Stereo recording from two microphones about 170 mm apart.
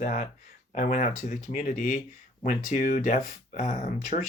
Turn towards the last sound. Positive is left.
turn(degrees=50)  # may be behind; listen again after turning